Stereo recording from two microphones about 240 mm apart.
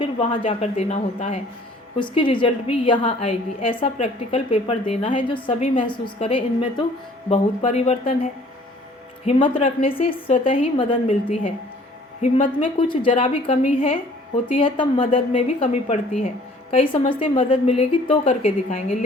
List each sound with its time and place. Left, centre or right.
0.0 s a woman's voice: left